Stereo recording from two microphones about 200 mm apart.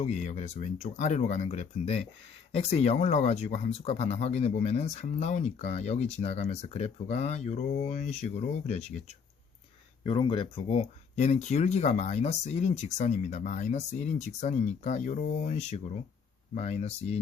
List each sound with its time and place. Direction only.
0.0 s speech: 35° left (ahead or behind)
10.1 s speech: 25° left (ahead or behind)